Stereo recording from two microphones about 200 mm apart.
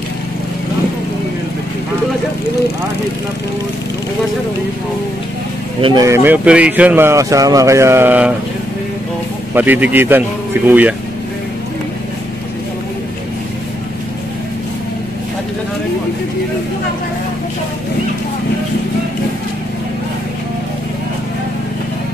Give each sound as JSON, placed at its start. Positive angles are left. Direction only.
{"t": 5.8, "sound": "speech", "side_deg": -25}
{"t": 6.0, "sound": "speech", "side_deg": -10}
{"t": 9.5, "sound": "speech", "side_deg": -10}